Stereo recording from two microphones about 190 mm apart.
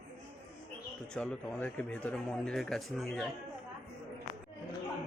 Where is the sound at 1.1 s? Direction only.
5° left (ahead or behind).